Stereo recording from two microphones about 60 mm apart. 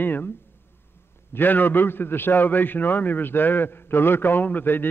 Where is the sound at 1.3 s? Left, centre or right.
Left.